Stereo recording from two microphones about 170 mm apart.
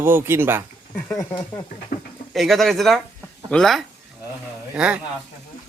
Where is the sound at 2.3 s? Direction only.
Centre (ahead or behind).